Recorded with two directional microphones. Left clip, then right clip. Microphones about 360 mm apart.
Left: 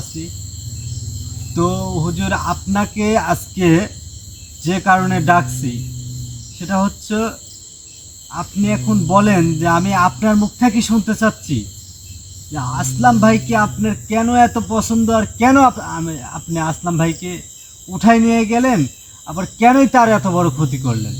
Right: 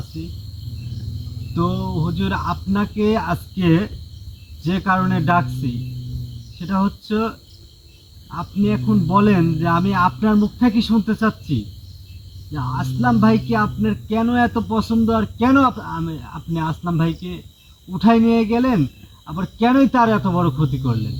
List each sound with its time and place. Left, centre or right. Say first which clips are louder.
1.5 s cricket: left 4 dB; centre
6.6 s cricket: left 4 dB; centre
8.4 s cricket: left 2 dB; centre
12.5 s cricket: left 4 dB; centre